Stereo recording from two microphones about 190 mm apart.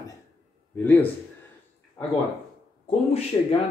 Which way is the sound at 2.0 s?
20° left (ahead or behind).